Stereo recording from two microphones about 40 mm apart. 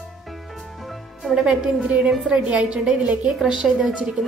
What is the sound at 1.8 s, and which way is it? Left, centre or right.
A woman's voice, right.